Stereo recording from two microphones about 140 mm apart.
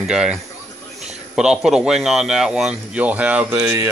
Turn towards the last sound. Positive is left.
turn(degrees=-10)  # may be behind; listen again after turning